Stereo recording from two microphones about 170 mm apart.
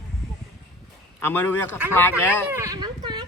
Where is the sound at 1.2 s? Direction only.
10° left (ahead or behind).